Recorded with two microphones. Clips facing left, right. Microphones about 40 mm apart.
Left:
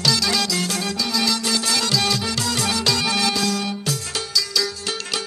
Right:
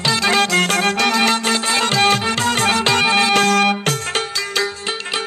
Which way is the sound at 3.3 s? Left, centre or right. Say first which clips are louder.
Right 9 dB; right.